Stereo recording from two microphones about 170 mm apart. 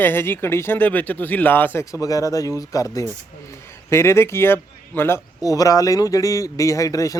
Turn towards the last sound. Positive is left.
turn(degrees=20)  # may be behind; listen again after turning